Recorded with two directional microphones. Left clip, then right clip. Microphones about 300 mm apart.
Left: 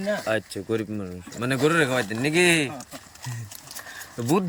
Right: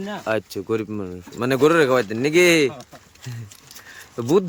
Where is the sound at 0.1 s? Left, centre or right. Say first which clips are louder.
Right 1 dB; centre.